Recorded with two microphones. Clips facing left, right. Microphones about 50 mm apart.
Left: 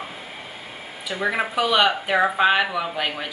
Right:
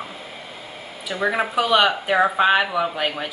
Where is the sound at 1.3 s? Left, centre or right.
Centre.